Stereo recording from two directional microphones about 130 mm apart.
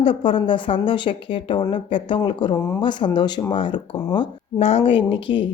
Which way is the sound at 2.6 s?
15° left (ahead or behind).